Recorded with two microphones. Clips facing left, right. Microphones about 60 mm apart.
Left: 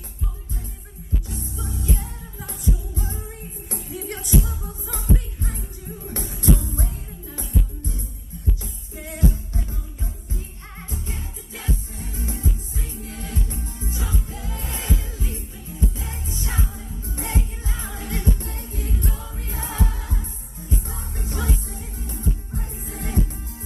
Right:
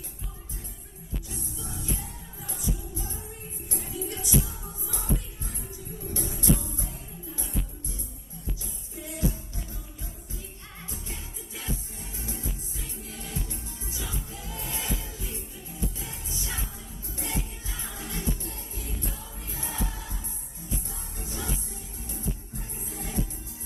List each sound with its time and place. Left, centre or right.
1.3 s music: left
8.9 s music: left